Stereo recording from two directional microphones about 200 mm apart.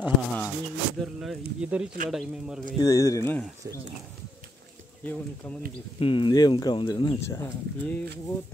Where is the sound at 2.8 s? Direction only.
15° left (ahead or behind).